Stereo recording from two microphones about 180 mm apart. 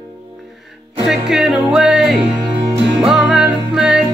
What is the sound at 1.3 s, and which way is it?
Music, 5° right (ahead or behind).